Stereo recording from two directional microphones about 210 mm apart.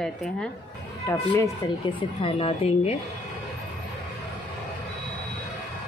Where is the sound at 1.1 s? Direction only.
15° left (ahead or behind).